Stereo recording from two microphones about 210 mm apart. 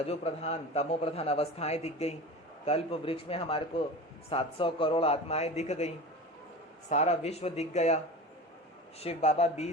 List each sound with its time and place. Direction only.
0.0 s a man's voice: 30° left (ahead or behind)
6.9 s speech: 30° left (ahead or behind)